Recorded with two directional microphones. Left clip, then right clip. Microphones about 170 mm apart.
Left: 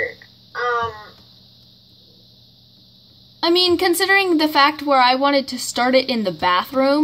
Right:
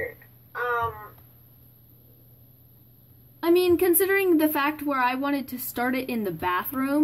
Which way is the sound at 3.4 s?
30° left (ahead or behind).